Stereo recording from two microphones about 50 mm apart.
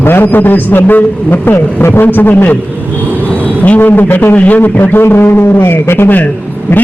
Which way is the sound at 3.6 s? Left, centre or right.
Left.